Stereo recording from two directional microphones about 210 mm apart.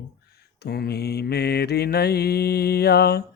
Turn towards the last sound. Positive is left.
turn(degrees=50)  # may be behind; listen again after turning